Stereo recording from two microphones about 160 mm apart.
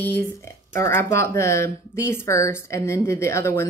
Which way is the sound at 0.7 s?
15° left (ahead or behind).